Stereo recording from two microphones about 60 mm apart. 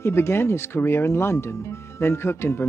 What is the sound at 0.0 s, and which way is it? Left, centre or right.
Speech, left.